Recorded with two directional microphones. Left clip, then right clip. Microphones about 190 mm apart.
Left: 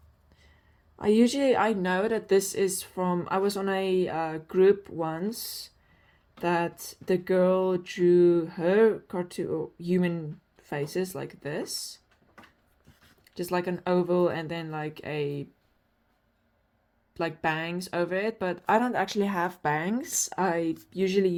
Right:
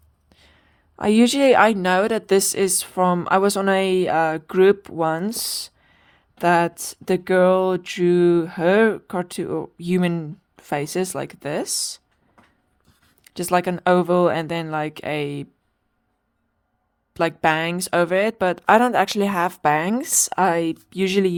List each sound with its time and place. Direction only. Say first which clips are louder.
0.3 s speech: right 8 dB; 55° right (ahead or behind)
13.2 s speech: right 9 dB; 50° right (ahead or behind)
17.2 s speech: right 10 dB; 50° right (ahead or behind)